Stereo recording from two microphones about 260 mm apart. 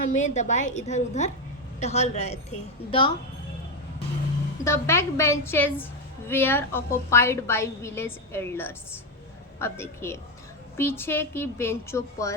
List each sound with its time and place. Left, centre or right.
0.1 s a woman's voice: left
4.6 s a woman's voice: centre